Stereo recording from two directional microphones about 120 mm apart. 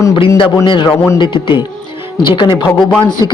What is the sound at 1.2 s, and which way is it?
A man's voice, 40° left (ahead or behind).